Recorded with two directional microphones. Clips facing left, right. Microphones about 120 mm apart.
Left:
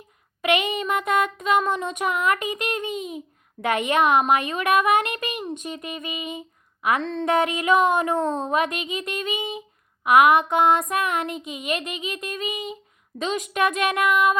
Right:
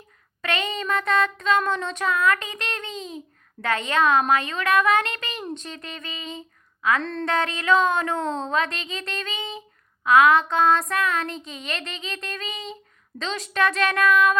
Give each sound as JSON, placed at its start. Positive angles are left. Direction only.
{"t": 0.4, "sound": "speech", "side_deg": 15}
{"t": 7.0, "sound": "a sound", "side_deg": 0}
{"t": 7.3, "sound": "speech", "side_deg": 15}